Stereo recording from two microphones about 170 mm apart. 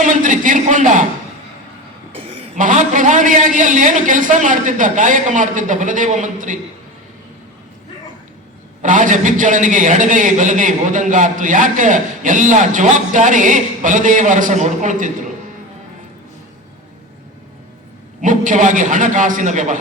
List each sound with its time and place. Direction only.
0.0 s a sound: 50° right (ahead or behind)
2.6 s a man's voice: 50° right (ahead or behind)
8.8 s a man's voice: 50° right (ahead or behind)
18.2 s a man's voice: 50° right (ahead or behind)